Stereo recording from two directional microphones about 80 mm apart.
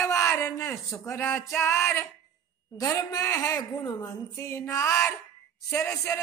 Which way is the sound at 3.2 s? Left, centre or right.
Left.